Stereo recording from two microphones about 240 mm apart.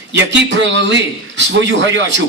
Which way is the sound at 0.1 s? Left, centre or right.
Right.